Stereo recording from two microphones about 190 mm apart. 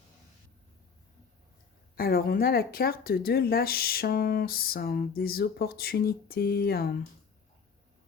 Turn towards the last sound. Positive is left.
turn(degrees=55)  # may be behind; listen again after turning